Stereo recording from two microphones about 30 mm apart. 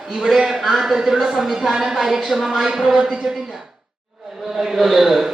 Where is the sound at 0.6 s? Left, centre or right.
Centre.